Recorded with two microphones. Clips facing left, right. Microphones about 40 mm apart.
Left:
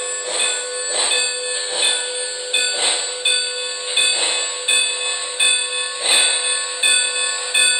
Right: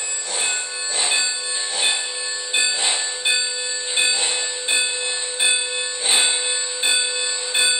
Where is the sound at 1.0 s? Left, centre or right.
Left.